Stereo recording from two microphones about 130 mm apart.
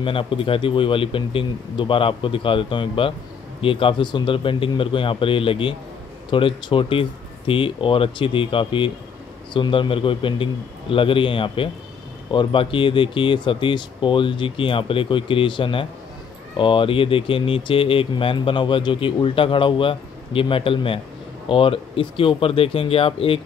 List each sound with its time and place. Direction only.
0.0 s speech: 45° left (ahead or behind)